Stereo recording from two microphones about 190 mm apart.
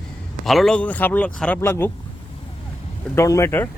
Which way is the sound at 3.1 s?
15° left (ahead or behind).